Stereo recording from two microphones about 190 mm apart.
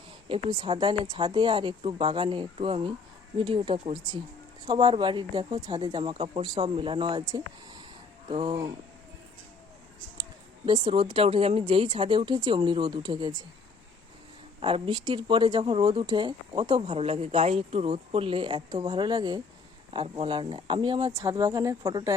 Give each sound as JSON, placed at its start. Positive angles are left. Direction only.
{"t": 0.3, "sound": "speech", "side_deg": -25}
{"t": 10.7, "sound": "speech", "side_deg": -25}
{"t": 14.6, "sound": "speech", "side_deg": -25}